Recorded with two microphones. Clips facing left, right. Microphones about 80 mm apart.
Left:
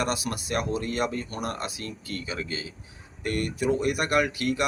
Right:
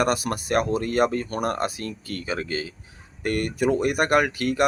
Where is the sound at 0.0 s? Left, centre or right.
Right.